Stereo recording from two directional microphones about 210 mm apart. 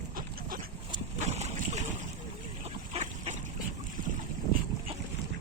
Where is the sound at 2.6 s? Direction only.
30° right (ahead or behind).